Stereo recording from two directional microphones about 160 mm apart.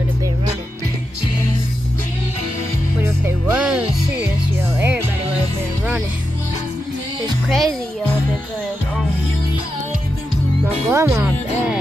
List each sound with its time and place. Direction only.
3.0 s music: 10° right (ahead or behind)
7.4 s music: centre (ahead or behind)
10.9 s speech: 20° right (ahead or behind)